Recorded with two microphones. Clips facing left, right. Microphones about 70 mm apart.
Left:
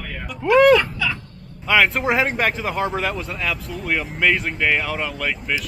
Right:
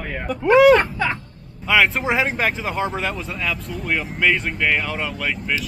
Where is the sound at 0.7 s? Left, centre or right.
Right.